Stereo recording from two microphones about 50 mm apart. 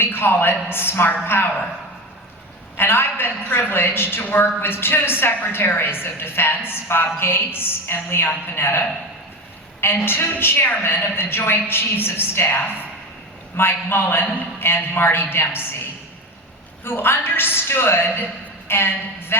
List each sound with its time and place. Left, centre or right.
0.0 s a woman's voice: left
2.7 s a woman's voice: left
10.0 s a woman's voice: left